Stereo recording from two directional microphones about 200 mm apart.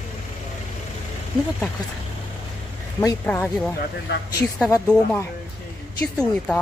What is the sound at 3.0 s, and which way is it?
Speech, 10° left (ahead or behind).